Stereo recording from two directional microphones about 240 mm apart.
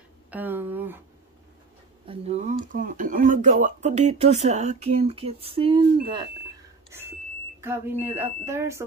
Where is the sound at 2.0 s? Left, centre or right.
Right.